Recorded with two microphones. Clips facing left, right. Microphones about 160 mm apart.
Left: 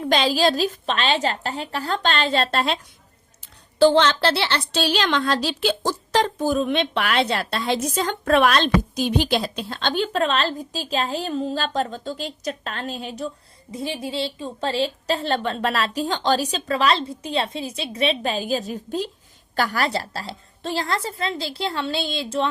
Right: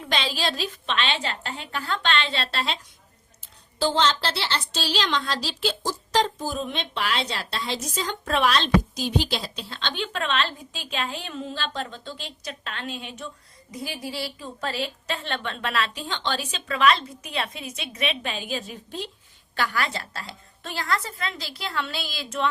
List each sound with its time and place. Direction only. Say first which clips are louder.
0.0 s a woman's voice: left 8 dB; 40° left (ahead or behind)
3.8 s a woman's voice: left 7 dB; 60° left (ahead or behind); by 22.4 s 30° left (ahead or behind)